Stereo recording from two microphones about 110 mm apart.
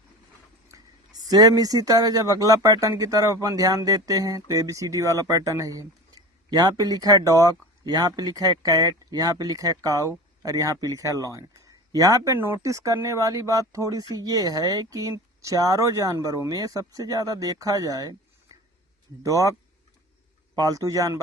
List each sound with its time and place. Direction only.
0.7 s speech: 35° right (ahead or behind)
19.2 s speech: 30° right (ahead or behind)
20.6 s speech: 35° right (ahead or behind)